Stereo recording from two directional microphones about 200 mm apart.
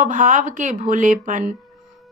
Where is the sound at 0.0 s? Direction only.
40° right (ahead or behind).